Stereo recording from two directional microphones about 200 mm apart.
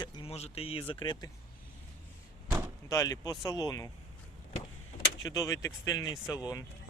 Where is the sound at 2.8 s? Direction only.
15° left (ahead or behind).